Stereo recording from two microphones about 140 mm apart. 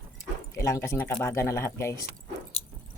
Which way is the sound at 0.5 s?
20° left (ahead or behind).